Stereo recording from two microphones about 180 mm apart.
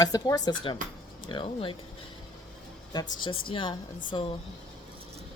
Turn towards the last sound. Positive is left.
turn(degrees=30)  # may be behind; listen again after turning